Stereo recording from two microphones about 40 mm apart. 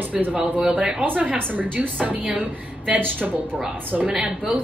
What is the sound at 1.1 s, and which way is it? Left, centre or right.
A woman's voice, right.